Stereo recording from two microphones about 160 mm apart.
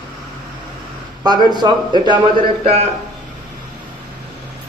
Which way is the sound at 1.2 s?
25° right (ahead or behind).